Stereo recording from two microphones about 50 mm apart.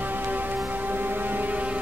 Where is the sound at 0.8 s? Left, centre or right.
Right.